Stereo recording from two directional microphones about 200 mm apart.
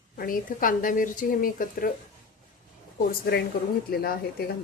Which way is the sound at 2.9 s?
50° left (ahead or behind).